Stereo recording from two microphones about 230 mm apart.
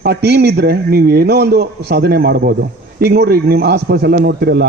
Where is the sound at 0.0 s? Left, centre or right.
Right.